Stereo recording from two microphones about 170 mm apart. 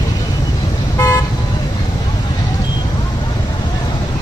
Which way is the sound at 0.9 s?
15° left (ahead or behind).